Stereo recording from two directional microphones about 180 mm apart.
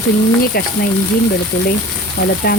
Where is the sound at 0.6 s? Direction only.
60° left (ahead or behind).